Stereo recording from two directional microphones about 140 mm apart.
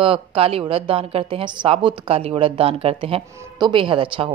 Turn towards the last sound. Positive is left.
turn(degrees=-40)  # may be behind; listen again after turning